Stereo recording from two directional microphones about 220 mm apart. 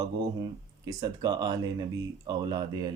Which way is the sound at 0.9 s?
15° right (ahead or behind).